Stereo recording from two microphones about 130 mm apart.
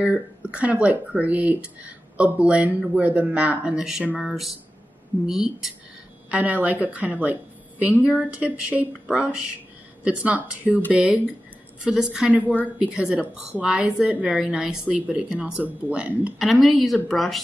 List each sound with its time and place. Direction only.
0.0 s speech: 10° right (ahead or behind)